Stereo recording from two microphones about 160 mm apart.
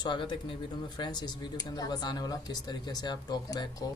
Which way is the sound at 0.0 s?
30° left (ahead or behind).